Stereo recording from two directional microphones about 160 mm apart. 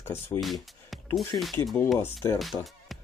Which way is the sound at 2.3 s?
Centre (ahead or behind).